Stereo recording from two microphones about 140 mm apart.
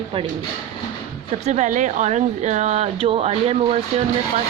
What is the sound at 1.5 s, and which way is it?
Speech, 60° right (ahead or behind).